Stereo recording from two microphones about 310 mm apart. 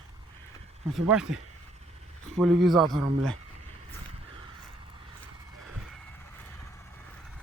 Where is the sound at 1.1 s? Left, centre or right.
Centre.